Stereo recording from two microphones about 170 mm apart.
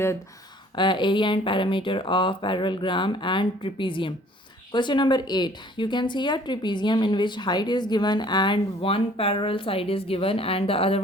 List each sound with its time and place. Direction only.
0.8 s a woman's voice: 30° left (ahead or behind)